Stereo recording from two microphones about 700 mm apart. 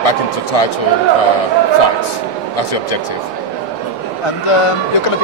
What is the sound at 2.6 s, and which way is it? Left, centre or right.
Speech, left.